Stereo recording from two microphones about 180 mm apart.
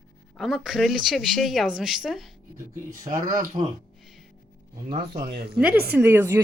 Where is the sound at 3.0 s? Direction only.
20° right (ahead or behind).